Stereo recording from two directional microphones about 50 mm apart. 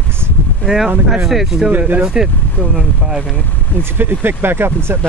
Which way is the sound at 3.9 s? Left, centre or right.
Right.